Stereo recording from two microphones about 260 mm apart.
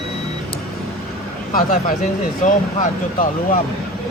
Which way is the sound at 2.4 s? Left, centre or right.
Left.